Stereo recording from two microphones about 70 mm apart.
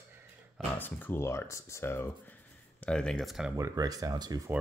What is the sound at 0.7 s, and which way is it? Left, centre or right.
Speech, left.